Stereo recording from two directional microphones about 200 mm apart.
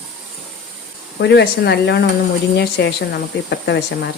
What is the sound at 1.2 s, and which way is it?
Speech, 60° left (ahead or behind).